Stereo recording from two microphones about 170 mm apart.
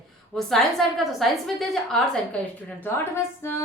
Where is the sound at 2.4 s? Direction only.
15° left (ahead or behind).